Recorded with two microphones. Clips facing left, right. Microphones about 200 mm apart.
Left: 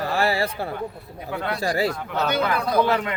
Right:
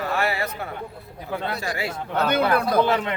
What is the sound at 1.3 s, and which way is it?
Speech, 30° right (ahead or behind).